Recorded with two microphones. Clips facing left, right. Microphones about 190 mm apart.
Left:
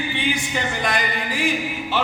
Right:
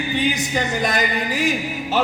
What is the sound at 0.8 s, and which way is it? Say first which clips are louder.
Music: right 3 dB; 40° right (ahead or behind).